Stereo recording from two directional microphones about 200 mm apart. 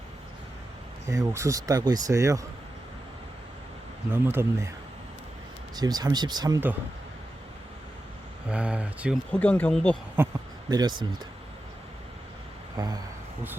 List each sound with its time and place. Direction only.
1.0 s speech: 15° right (ahead or behind)
4.1 s speech: 10° right (ahead or behind)
5.7 s speech: 20° right (ahead or behind)
8.4 s speech: 5° right (ahead or behind)
9.3 s speech: 5° left (ahead or behind)
10.7 s speech: 20° right (ahead or behind)
12.7 s a sound: 20° right (ahead or behind)